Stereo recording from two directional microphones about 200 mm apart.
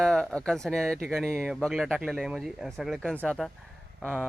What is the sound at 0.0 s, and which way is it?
Speech, 5° left (ahead or behind).